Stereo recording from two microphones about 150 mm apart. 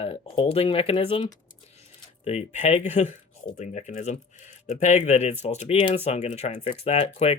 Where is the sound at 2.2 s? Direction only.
45° left (ahead or behind).